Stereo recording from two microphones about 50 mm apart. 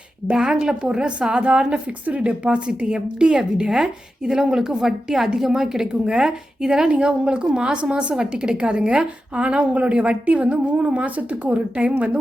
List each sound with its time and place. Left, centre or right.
0.3 s a woman's voice: centre